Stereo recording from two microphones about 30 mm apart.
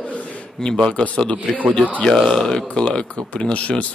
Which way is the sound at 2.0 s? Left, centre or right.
Left.